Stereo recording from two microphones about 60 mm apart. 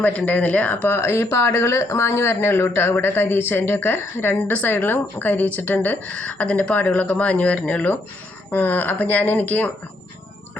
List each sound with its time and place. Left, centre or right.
0.3 s speech: left
2.0 s a woman's voice: left